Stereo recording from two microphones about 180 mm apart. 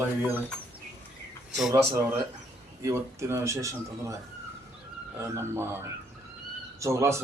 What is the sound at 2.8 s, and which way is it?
A man's voice, 15° right (ahead or behind).